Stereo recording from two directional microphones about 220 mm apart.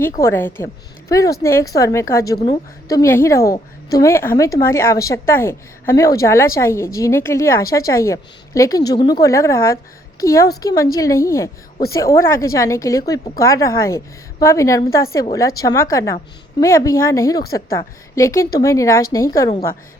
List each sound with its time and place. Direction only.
0.2 s a woman's voice: 10° left (ahead or behind)